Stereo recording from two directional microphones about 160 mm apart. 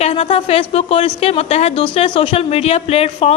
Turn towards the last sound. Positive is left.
turn(degrees=40)  # may be behind; listen again after turning